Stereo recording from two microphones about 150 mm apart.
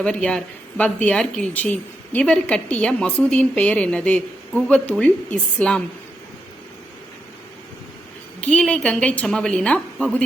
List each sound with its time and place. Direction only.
0.0 s a woman's voice: 10° left (ahead or behind)
8.4 s a woman's voice: 5° left (ahead or behind)